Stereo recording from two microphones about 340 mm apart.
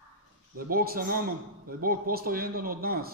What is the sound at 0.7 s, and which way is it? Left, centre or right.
A man's voice, right.